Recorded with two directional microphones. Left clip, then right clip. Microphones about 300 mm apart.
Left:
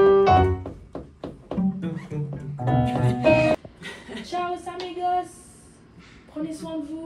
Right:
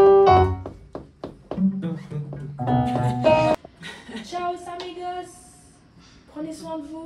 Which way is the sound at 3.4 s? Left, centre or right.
Centre.